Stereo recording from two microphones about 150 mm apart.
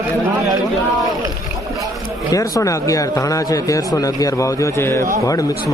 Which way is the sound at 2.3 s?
25° left (ahead or behind).